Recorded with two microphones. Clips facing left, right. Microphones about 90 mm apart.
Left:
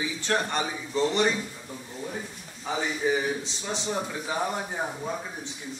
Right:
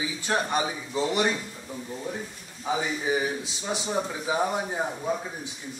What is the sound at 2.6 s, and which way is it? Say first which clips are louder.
A man's voice: even; 10° right (ahead or behind).